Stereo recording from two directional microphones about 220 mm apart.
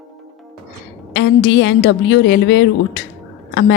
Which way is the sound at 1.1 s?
55° left (ahead or behind).